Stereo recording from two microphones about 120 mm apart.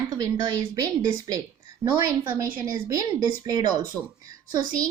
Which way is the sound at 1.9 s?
15° right (ahead or behind).